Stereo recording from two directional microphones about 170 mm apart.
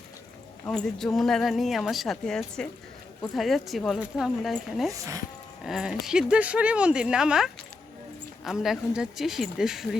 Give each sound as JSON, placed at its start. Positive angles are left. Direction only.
{"t": 0.7, "sound": "a woman's voice", "side_deg": 0}
{"t": 4.9, "sound": "speech", "side_deg": -20}
{"t": 5.6, "sound": "a woman's voice", "side_deg": 0}